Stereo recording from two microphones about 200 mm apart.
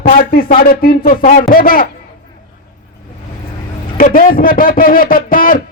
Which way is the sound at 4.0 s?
45° left (ahead or behind).